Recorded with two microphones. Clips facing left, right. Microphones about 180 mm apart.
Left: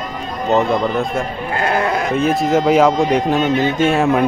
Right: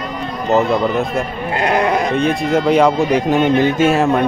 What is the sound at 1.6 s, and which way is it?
Sheep, 20° right (ahead or behind).